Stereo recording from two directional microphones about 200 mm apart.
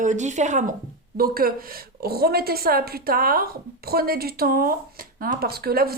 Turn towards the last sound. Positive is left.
turn(degrees=-50)  # may be behind; listen again after turning